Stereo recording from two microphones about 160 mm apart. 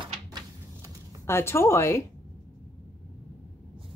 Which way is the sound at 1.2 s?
15° left (ahead or behind).